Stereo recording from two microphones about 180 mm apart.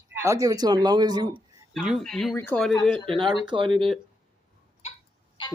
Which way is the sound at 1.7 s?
Centre (ahead or behind).